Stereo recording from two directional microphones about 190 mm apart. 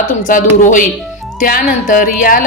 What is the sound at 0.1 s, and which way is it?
A woman's voice, 45° left (ahead or behind).